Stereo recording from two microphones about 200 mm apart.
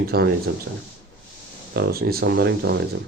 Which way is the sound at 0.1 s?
50° right (ahead or behind).